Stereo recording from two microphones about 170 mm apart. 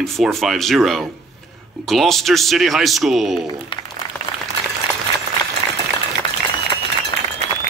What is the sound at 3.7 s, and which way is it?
Speech, 30° left (ahead or behind).